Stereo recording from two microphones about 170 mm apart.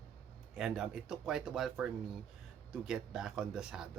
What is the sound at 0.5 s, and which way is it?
Speech, 5° right (ahead or behind).